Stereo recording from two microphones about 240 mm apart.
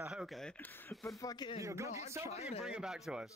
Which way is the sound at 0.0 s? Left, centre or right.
Centre.